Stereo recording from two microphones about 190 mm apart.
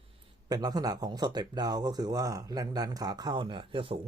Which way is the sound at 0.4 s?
20° right (ahead or behind).